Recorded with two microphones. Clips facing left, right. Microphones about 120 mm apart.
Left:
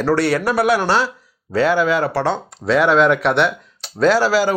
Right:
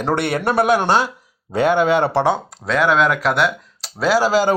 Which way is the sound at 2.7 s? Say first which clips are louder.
Left 3 dB; centre (ahead or behind).